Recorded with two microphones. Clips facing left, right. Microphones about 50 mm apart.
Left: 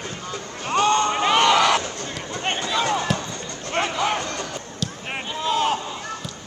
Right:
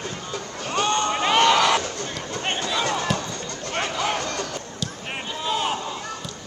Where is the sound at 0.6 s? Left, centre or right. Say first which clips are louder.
Left 4 dB; left.